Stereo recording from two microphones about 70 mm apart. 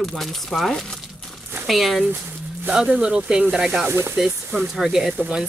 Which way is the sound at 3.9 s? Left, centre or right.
Right.